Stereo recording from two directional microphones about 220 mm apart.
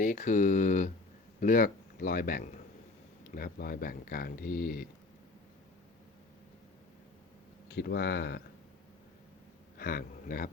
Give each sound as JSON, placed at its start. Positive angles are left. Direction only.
{"t": 0.0, "sound": "a man's voice", "side_deg": 35}
{"t": 7.7, "sound": "speech", "side_deg": 45}
{"t": 9.7, "sound": "speech", "side_deg": 40}